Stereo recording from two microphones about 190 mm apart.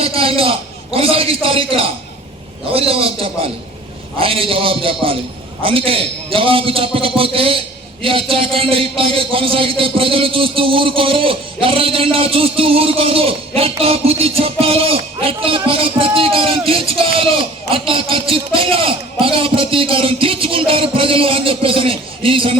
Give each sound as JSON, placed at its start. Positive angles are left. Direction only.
{"t": 0.2, "sound": "speech", "side_deg": -30}